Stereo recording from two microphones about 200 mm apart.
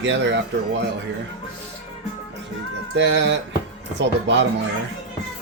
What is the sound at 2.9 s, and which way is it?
Speech, 60° right (ahead or behind).